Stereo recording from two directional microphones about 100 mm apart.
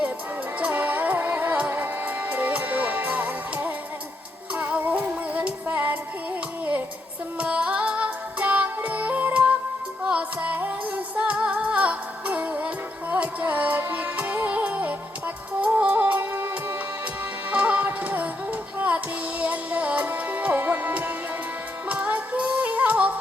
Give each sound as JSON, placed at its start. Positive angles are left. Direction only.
{"t": 0.6, "sound": "music", "side_deg": -15}
{"t": 7.3, "sound": "music", "side_deg": -10}